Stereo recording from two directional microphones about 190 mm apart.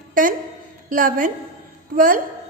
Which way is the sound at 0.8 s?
45° right (ahead or behind).